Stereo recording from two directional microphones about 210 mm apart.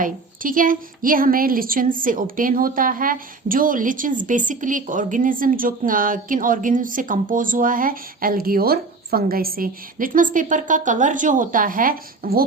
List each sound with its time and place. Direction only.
0.0 s a woman's voice: 40° right (ahead or behind)